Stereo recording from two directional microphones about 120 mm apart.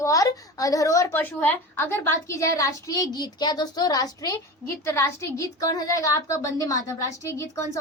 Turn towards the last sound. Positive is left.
turn(degrees=25)  # may be behind; listen again after turning